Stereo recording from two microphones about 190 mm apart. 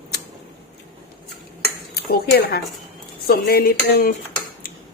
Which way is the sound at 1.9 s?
55° left (ahead or behind).